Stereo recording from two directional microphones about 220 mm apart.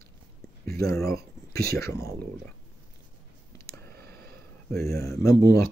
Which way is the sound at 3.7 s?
45° right (ahead or behind).